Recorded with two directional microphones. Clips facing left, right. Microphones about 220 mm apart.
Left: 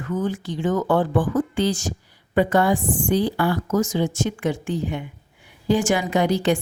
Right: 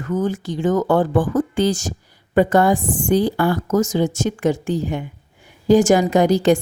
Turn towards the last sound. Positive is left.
turn(degrees=-40)  # may be behind; listen again after turning